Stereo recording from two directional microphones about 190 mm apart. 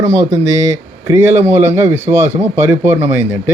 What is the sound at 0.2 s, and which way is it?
Speech, 15° right (ahead or behind).